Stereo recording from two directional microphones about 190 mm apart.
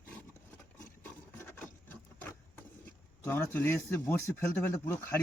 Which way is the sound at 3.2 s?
10° left (ahead or behind).